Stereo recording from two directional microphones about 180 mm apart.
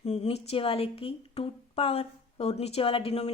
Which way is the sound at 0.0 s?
35° left (ahead or behind).